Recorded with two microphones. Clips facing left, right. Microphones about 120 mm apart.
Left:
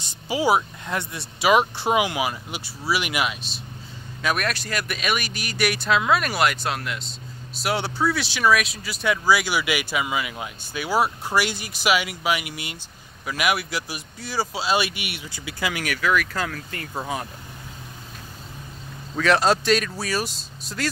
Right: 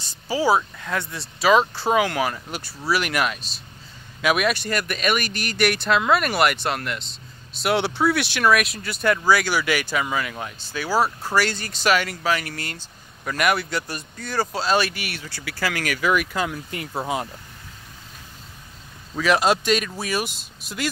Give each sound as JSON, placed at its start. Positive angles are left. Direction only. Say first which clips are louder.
{"t": 0.0, "sound": "speech", "louder": "right 1 dB", "side_deg": 20}
{"t": 4.2, "sound": "speech", "louder": "right 4 dB", "side_deg": -5}
{"t": 16.0, "sound": "speech", "louder": "right 1 dB", "side_deg": -15}
{"t": 19.1, "sound": "speech", "louder": "even", "side_deg": -10}